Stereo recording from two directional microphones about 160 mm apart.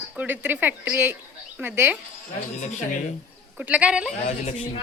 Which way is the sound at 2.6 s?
50° left (ahead or behind).